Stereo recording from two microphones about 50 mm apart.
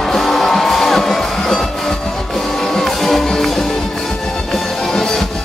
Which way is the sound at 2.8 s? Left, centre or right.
Centre.